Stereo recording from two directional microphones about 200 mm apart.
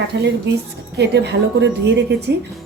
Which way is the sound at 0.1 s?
65° right (ahead or behind).